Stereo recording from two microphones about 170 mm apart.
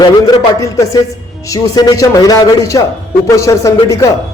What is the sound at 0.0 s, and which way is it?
A man's voice, 25° left (ahead or behind).